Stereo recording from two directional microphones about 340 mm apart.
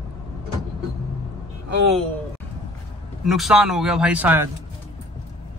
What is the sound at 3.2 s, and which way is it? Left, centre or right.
Speech, centre.